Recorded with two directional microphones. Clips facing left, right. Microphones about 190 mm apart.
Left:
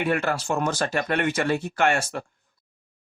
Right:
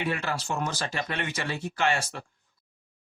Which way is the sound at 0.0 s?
50° left (ahead or behind).